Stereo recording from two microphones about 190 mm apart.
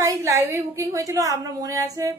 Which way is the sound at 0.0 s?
15° right (ahead or behind).